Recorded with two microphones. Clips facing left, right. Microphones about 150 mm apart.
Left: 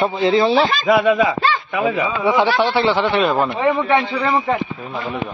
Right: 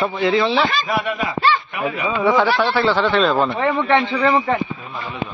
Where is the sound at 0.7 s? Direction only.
90° left.